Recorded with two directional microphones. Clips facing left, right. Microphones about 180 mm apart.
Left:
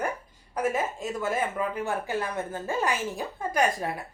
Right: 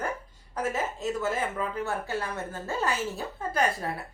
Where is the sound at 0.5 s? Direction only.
10° left (ahead or behind).